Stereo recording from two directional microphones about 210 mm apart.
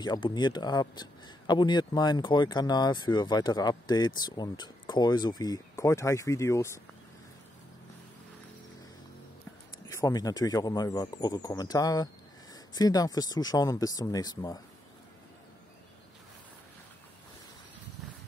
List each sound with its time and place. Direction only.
0.0 s speech: 20° left (ahead or behind)
9.8 s speech: 15° left (ahead or behind)